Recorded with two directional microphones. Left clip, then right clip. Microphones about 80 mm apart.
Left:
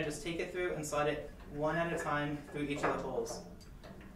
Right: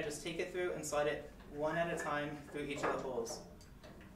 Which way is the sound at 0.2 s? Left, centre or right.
Centre.